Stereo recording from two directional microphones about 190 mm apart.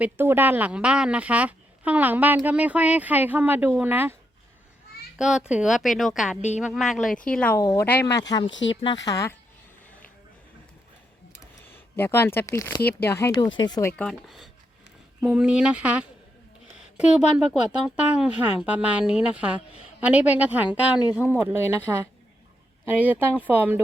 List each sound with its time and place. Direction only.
0.0 s a woman's voice: 10° right (ahead or behind)
5.1 s a woman's voice: 5° right (ahead or behind)
7.6 s speech: 20° left (ahead or behind)
8.4 s speech: 75° left (ahead or behind)
8.7 s speech: 25° left (ahead or behind)
11.9 s speech: 10° left (ahead or behind)
14.0 s a woman's voice: centre (ahead or behind)